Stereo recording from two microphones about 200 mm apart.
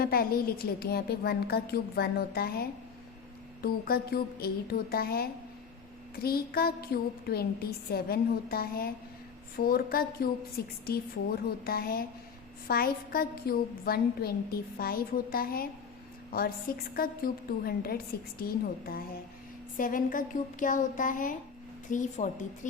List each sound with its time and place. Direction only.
0.0 s a woman's voice: 50° left (ahead or behind)